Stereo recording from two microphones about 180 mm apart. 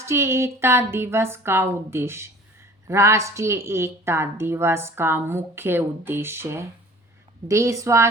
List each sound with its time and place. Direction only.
0.0 s a woman's voice: 15° right (ahead or behind)